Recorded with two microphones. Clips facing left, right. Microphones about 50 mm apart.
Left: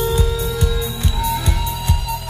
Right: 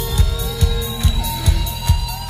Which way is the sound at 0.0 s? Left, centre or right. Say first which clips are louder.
Left 6 dB; left.